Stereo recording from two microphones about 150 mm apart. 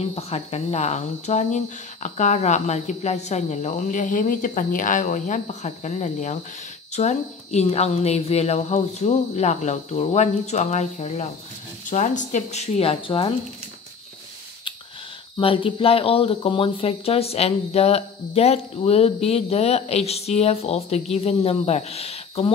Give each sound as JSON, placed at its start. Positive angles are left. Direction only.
{"t": 0.0, "sound": "a woman's voice", "side_deg": 45}
{"t": 15.3, "sound": "a woman's voice", "side_deg": 35}